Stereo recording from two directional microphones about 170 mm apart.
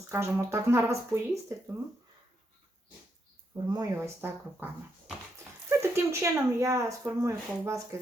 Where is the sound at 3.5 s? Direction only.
20° right (ahead or behind).